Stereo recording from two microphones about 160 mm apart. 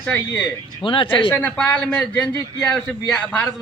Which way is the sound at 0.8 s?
30° left (ahead or behind).